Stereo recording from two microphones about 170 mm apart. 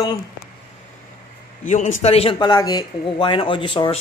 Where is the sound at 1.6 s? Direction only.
45° left (ahead or behind).